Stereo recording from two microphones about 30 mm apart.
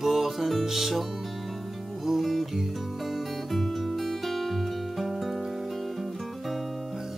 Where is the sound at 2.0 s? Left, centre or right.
Centre.